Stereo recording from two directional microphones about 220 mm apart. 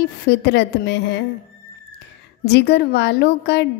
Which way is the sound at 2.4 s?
50° left (ahead or behind).